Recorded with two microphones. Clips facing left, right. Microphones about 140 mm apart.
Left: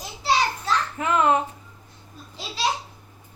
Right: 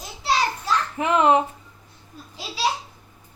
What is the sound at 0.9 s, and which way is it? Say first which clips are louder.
Speech: right 3 dB; 20° right (ahead or behind).